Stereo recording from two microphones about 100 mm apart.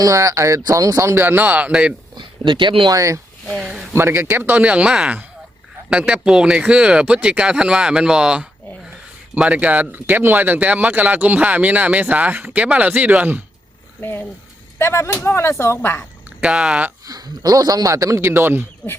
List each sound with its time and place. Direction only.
0.0 s speech: 35° right (ahead or behind); by 1.9 s 10° right (ahead or behind)
2.1 s speech: 55° right (ahead or behind)
2.9 s speech: 30° right (ahead or behind)
3.4 s speech: 5° right (ahead or behind)
3.9 s speech: 25° right (ahead or behind)
14.0 s speech: 20° left (ahead or behind)
16.4 s speech: 10° right (ahead or behind)
17.1 s speech: 40° right (ahead or behind); by 18.6 s 20° right (ahead or behind)